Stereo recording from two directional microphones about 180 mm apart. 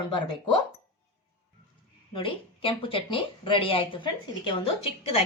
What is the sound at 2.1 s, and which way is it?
Speech, 30° left (ahead or behind).